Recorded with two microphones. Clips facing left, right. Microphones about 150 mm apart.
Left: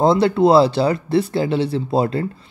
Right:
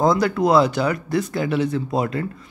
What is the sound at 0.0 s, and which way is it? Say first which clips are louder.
Speech: left 4 dB; 30° left (ahead or behind).